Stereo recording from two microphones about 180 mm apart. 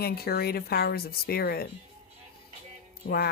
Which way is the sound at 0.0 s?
60° left (ahead or behind).